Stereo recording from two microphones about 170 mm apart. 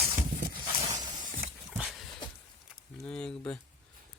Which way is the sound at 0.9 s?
45° right (ahead or behind).